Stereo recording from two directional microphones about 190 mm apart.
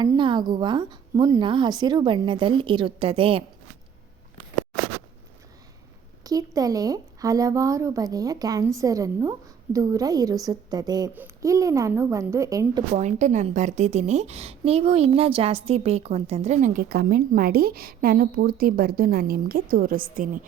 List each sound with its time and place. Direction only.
0.0 s a woman's voice: 25° right (ahead or behind)
6.2 s a woman's voice: 20° right (ahead or behind)
12.9 s a woman's voice: 40° right (ahead or behind)